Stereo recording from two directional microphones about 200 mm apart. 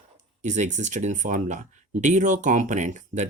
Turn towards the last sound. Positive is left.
turn(degrees=-35)  # may be behind; listen again after turning